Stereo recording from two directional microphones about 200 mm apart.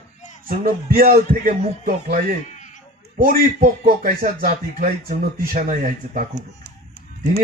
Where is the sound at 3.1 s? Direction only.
45° right (ahead or behind).